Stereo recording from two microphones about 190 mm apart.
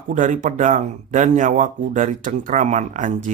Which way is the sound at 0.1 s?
40° right (ahead or behind).